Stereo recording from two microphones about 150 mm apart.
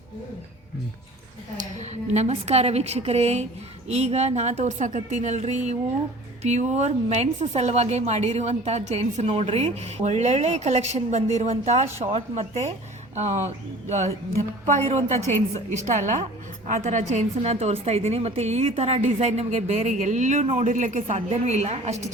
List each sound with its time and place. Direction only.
1.5 s a woman's voice: 50° right (ahead or behind)
14.8 s a woman's voice: 45° right (ahead or behind)